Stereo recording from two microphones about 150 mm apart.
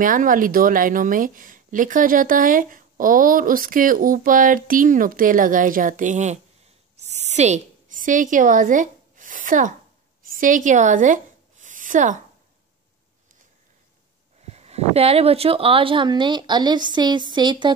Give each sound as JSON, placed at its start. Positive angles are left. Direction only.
{"t": 0.0, "sound": "a woman's voice", "side_deg": -65}
{"t": 7.0, "sound": "a sound", "side_deg": -50}
{"t": 14.5, "sound": "speech", "side_deg": -45}